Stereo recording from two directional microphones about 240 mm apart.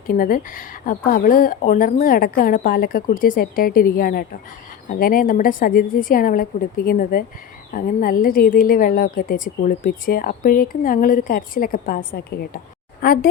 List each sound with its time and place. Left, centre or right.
0.1 s a woman's voice: left